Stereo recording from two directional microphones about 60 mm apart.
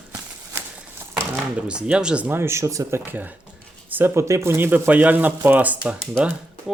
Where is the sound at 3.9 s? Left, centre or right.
Right.